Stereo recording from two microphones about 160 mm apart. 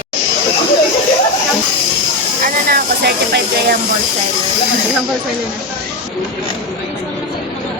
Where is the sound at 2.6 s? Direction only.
80° right.